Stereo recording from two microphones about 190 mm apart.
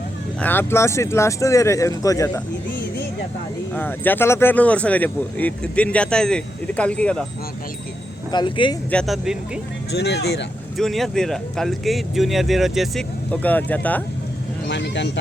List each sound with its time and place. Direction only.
0.3 s speech: 10° left (ahead or behind)
3.8 s speech: 10° left (ahead or behind)
8.3 s speech: 25° left (ahead or behind)
8.9 s speech: centre (ahead or behind)
9.9 s speech: 60° left (ahead or behind)
10.8 s speech: centre (ahead or behind)
14.7 s speech: 65° left (ahead or behind)